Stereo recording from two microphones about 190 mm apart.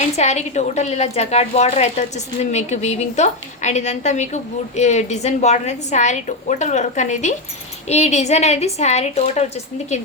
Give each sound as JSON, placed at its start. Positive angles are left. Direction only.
{"t": 0.2, "sound": "a woman's voice", "side_deg": 35}